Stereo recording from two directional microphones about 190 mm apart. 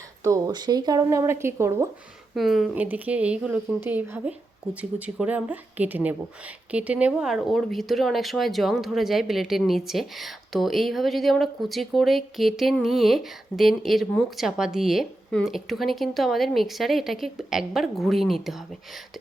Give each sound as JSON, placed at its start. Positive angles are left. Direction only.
{"t": 0.3, "sound": "speech", "side_deg": -15}
{"t": 2.3, "sound": "speech", "side_deg": 0}